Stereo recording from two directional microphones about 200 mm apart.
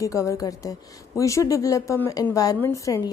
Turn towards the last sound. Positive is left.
turn(degrees=15)  # may be behind; listen again after turning